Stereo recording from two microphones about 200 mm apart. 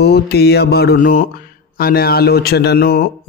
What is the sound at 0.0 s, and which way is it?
A man's voice, 55° left (ahead or behind).